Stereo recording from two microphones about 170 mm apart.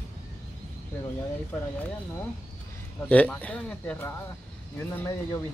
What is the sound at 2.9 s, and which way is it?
Speech, 10° left (ahead or behind).